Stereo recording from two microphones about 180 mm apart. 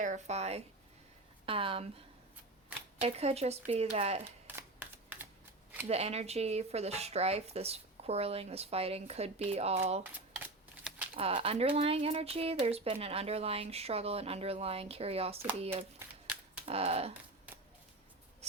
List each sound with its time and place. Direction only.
0.0 s a woman's voice: 40° right (ahead or behind)
3.0 s speech: 35° right (ahead or behind)
4.2 s camera: 10° right (ahead or behind)
5.9 s speech: 35° right (ahead or behind)
10.2 s shuffling cards: 10° right (ahead or behind)
11.2 s speech: 30° right (ahead or behind)